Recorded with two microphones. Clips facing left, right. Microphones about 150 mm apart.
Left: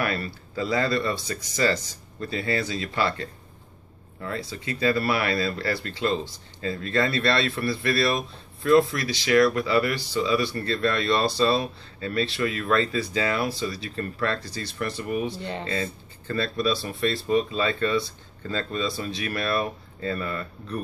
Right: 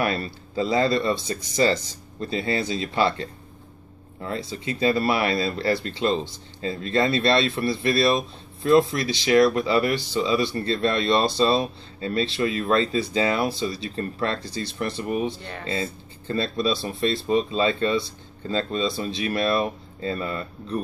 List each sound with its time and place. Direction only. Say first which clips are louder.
0.0 s speech: right 3 dB; 25° right (ahead or behind)